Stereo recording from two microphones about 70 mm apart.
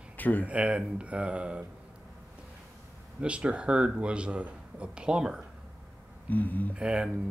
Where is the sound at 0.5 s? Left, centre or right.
Centre.